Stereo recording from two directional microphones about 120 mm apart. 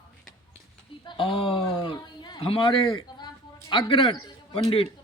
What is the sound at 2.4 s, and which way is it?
A man's voice, 45° left (ahead or behind).